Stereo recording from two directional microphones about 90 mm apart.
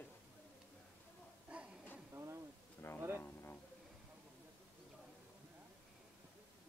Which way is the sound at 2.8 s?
25° left (ahead or behind).